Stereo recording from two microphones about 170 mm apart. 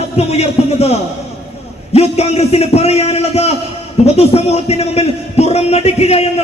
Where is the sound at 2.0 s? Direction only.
35° left (ahead or behind).